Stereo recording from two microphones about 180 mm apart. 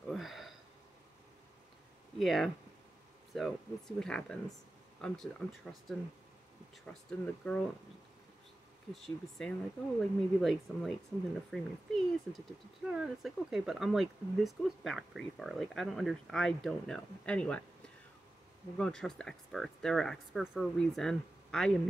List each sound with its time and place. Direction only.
0.1 s sniff: centre (ahead or behind)
2.1 s speech: centre (ahead or behind)
8.9 s speech: centre (ahead or behind)
18.8 s speech: 5° left (ahead or behind)